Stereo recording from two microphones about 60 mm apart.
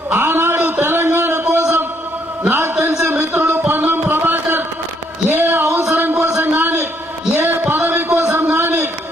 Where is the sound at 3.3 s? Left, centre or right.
Right.